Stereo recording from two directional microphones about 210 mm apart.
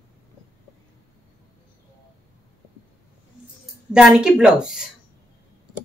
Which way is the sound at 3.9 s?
5° right (ahead or behind).